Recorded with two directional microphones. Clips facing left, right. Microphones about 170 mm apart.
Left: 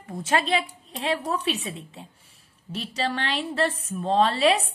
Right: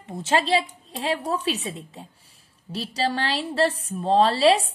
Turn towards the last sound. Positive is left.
turn(degrees=-35)  # may be behind; listen again after turning